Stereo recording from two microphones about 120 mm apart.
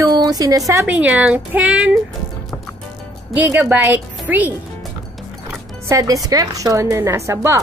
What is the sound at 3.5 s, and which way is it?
Speech, 15° right (ahead or behind).